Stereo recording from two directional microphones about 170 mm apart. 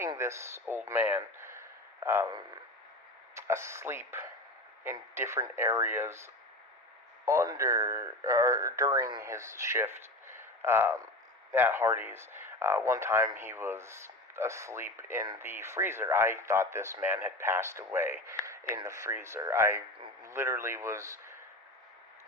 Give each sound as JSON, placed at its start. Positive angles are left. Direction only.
{"t": 0.0, "sound": "a man's voice", "side_deg": -15}
{"t": 7.3, "sound": "speech", "side_deg": -20}